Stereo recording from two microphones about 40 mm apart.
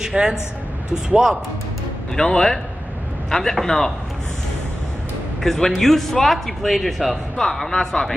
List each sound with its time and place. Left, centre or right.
0.0 s a woman's voice: centre
2.1 s a man's voice: left
5.4 s speech: centre